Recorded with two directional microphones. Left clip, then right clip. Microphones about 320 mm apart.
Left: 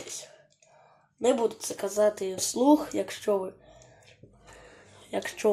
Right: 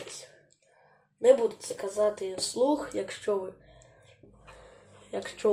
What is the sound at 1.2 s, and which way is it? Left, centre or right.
Speech, left.